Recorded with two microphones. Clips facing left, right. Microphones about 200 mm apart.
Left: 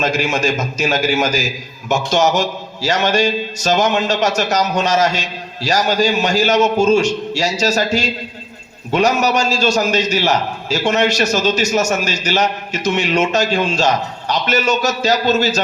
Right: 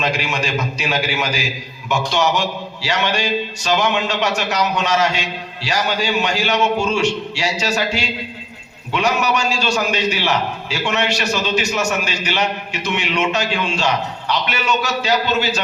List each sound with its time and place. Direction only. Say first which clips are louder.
0.0 s a man's voice: left 4 dB; 45° left (ahead or behind)